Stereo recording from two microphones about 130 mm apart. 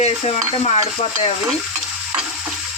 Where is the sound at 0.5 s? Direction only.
50° left (ahead or behind).